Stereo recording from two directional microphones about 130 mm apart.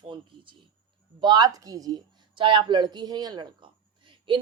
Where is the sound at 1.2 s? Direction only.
30° right (ahead or behind).